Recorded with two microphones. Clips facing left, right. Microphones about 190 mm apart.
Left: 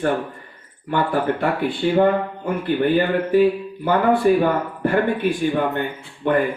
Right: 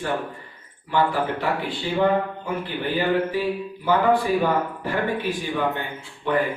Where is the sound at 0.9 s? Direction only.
55° left (ahead or behind).